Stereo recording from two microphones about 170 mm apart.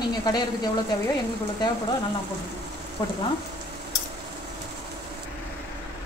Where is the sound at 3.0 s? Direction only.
25° left (ahead or behind).